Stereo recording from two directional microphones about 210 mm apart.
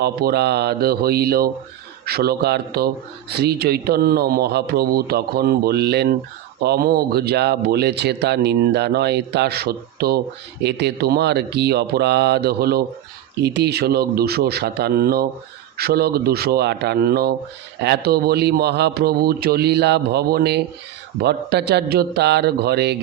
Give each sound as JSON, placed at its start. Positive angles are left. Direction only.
{"t": 0.0, "sound": "speech", "side_deg": -50}